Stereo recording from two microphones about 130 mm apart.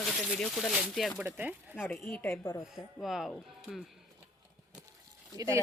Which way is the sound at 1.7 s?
10° left (ahead or behind).